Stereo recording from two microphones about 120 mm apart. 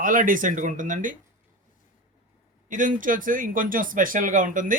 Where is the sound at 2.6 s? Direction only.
90° right.